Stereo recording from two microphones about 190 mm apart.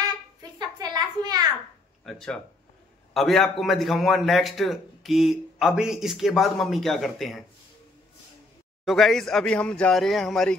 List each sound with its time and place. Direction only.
0.4 s a sound: 20° right (ahead or behind)
2.0 s a man's voice: centre (ahead or behind)
8.8 s a man's voice: centre (ahead or behind)